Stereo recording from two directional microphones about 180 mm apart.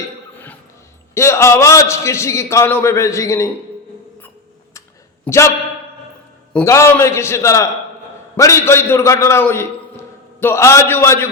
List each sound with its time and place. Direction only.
1.1 s a man's voice: 15° left (ahead or behind)
5.2 s speech: 15° left (ahead or behind)
6.5 s a man's voice: 10° left (ahead or behind)